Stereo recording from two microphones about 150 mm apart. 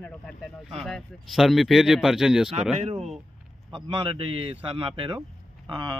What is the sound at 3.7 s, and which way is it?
A man's voice, 35° right (ahead or behind).